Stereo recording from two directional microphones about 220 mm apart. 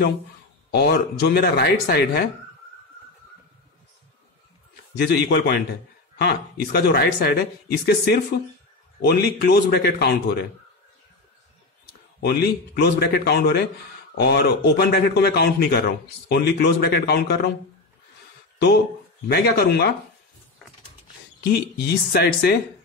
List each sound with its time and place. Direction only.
0.7 s speech: 45° left (ahead or behind)
5.0 s speech: 50° left (ahead or behind)
12.2 s speech: 45° left (ahead or behind)
19.2 s speech: 45° left (ahead or behind)
21.5 s speech: 45° left (ahead or behind)